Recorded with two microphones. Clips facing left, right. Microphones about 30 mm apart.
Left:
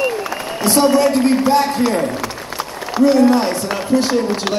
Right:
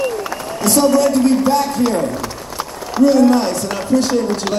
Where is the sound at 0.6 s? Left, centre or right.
Left.